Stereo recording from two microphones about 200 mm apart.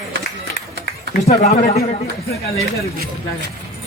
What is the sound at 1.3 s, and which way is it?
Speech, 30° left (ahead or behind).